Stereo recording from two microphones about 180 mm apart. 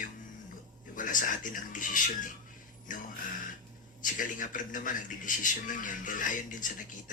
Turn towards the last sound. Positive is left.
turn(degrees=45)  # may be behind; listen again after turning